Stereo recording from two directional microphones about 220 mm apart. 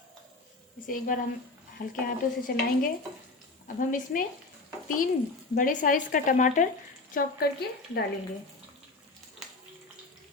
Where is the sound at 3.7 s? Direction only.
35° left (ahead or behind).